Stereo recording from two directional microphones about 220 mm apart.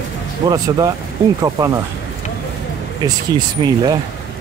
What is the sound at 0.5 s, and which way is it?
Speech, 20° right (ahead or behind).